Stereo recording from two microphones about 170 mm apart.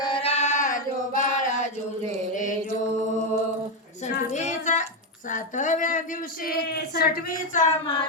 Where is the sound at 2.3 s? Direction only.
50° left (ahead or behind).